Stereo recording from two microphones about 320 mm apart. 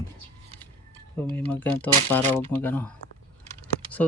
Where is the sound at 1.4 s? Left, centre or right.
Centre.